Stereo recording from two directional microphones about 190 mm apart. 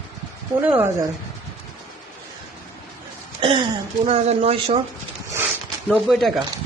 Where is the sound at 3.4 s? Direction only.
25° right (ahead or behind).